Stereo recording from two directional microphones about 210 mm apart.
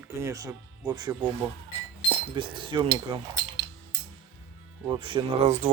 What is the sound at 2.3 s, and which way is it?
Speech, 25° right (ahead or behind).